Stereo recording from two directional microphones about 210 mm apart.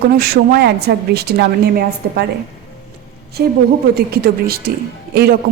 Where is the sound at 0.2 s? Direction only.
50° right (ahead or behind).